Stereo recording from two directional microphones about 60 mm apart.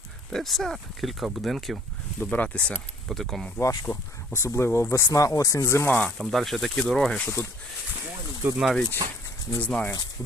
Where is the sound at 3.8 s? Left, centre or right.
Left.